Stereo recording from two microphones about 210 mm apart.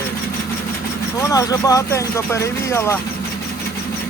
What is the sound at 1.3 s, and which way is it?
Speech, 15° left (ahead or behind).